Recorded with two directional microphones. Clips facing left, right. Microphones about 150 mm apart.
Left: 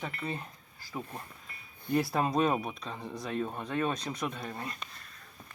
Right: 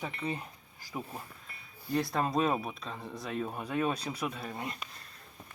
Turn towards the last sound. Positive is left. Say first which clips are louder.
# even
turn(degrees=-5)  # may be behind; listen again after turning